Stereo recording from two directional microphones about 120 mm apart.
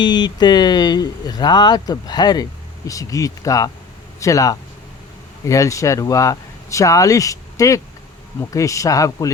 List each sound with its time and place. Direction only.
0.0 s speech: 35° left (ahead or behind)